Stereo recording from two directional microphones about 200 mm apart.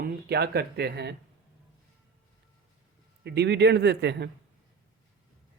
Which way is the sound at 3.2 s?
55° right (ahead or behind).